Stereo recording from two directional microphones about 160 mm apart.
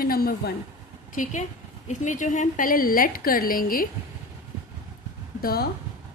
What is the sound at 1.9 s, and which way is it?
A woman's voice, 50° left (ahead or behind).